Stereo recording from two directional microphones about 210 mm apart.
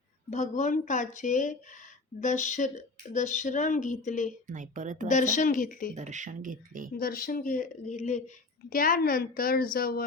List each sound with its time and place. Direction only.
0.3 s speech: 35° left (ahead or behind)
4.4 s speech: 40° right (ahead or behind)
5.0 s speech: 35° left (ahead or behind)
5.9 s speech: 35° right (ahead or behind)
6.9 s a woman's voice: 45° left (ahead or behind)